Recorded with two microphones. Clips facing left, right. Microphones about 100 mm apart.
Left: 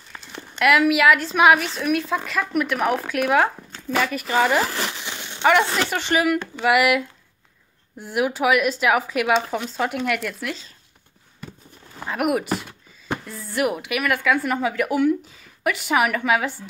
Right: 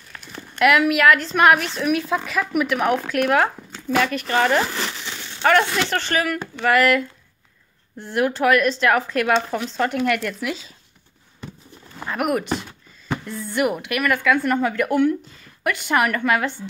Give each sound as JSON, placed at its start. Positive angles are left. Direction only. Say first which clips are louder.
{"t": 0.3, "sound": "a woman's voice", "louder": "right 1 dB", "side_deg": 0}
{"t": 12.0, "sound": "speech", "louder": "even", "side_deg": 5}